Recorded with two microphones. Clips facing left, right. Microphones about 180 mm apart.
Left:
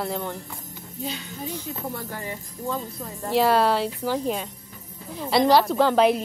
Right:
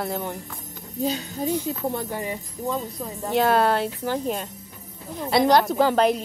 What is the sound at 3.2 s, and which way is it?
A woman's voice, centre (ahead or behind).